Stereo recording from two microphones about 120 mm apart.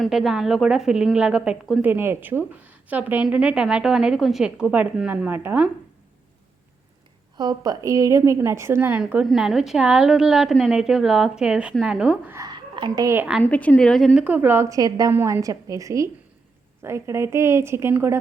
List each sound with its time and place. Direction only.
0.0 s a woman's voice: 5° right (ahead or behind)
1.8 s a woman's voice: 20° right (ahead or behind)
7.3 s a woman's voice: 35° right (ahead or behind); by 12.3 s 10° right (ahead or behind)
12.5 s a sound: 40° right (ahead or behind)
13.4 s a woman's voice: 10° left (ahead or behind)
14.3 s a woman's voice: 15° right (ahead or behind)